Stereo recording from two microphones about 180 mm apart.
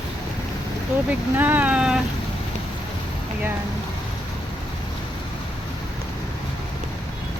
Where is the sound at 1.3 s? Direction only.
10° right (ahead or behind).